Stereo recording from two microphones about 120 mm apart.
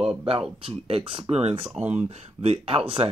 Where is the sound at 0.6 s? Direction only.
50° right (ahead or behind).